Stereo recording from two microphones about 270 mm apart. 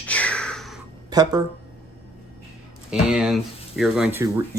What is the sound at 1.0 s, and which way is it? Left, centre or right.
Speech, centre.